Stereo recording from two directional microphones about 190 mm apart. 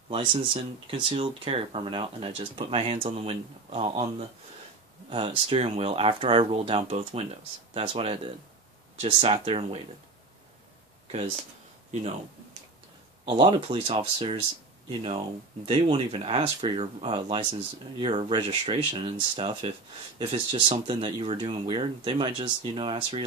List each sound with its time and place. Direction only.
0.1 s speech: 30° right (ahead or behind)
5.1 s speech: 30° right (ahead or behind)
13.2 s speech: 25° right (ahead or behind)